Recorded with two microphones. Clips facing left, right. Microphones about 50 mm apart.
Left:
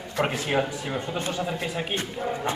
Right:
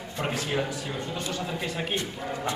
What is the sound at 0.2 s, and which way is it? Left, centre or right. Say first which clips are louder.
Speech: left 4 dB; left.